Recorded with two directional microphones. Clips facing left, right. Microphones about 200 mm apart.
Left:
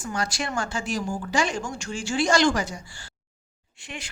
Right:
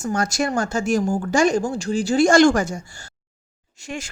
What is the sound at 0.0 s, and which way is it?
Speech, 45° right (ahead or behind).